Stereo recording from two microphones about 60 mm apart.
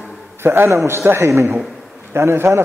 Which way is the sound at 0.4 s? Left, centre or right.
Right.